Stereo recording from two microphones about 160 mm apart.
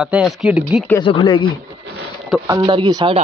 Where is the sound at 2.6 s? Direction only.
30° right (ahead or behind).